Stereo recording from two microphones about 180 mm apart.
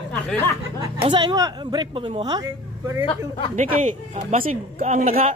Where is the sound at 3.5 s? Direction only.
40° right (ahead or behind).